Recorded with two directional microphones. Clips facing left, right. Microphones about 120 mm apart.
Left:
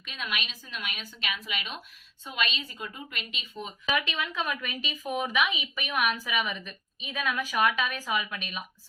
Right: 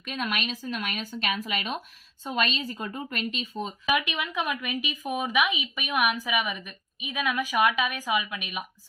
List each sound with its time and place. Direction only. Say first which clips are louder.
0.0 s a woman's voice: right 5 dB; 45° right (ahead or behind)
3.8 s a woman's voice: right 2 dB; 15° right (ahead or behind)